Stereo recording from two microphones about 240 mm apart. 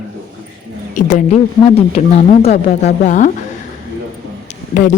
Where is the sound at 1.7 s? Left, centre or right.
Left.